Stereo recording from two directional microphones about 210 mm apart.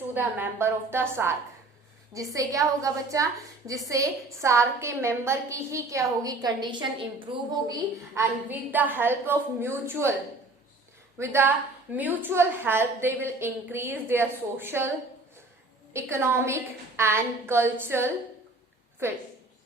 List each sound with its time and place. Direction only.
0.1 s a woman's voice: 10° right (ahead or behind)
7.7 s a woman's voice: 10° right (ahead or behind)
11.2 s a woman's voice: 10° right (ahead or behind)